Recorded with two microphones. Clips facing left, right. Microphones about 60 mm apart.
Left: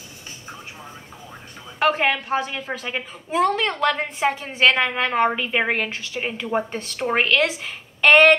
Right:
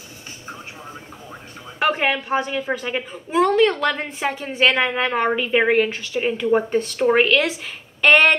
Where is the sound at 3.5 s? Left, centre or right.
Centre.